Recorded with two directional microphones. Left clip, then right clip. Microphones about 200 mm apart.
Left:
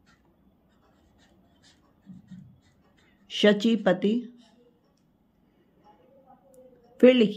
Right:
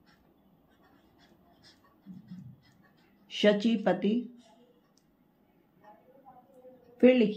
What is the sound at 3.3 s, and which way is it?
Speech, 50° left (ahead or behind).